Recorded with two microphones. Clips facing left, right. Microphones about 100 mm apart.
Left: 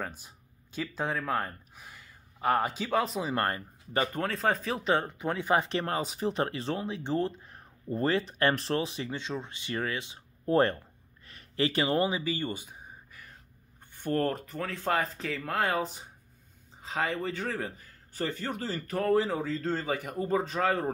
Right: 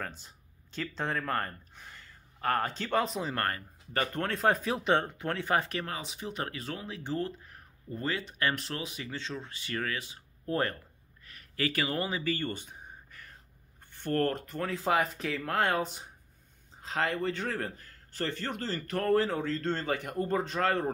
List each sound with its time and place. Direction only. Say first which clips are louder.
0.0 s speech: left 2 dB; 10° left (ahead or behind)
3.3 s speech: left 3 dB; 20° left (ahead or behind)
4.2 s a man's voice: right 1 dB; centre (ahead or behind)
5.2 s speech: left 2 dB; 10° left (ahead or behind)
5.8 s speech: left 6 dB; 40° left (ahead or behind)
7.9 s speech: left 6 dB; 35° left (ahead or behind)
9.1 s speech: left 3 dB; 20° left (ahead or behind)
11.2 s a sound: left 4 dB; 25° left (ahead or behind); by 13.3 s 10° left (ahead or behind)
13.9 s speech: even; 10° left (ahead or behind)
14.5 s a man's voice: right 1 dB; centre (ahead or behind)